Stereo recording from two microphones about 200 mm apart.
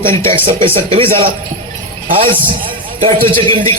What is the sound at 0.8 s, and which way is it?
A man's voice, 25° right (ahead or behind).